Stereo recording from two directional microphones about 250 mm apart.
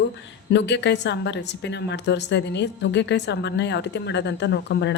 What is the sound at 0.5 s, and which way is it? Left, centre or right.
Speech, left.